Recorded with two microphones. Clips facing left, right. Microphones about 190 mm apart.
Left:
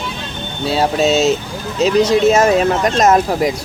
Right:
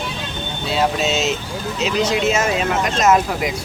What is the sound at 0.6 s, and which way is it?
Speech, 35° left (ahead or behind).